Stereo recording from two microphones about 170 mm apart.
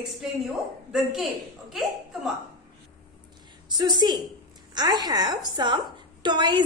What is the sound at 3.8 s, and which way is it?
A woman's voice, 25° right (ahead or behind).